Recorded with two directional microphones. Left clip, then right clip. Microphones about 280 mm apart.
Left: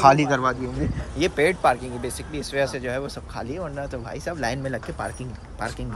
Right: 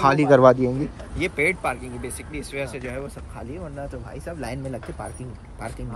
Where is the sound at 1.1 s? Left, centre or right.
Centre.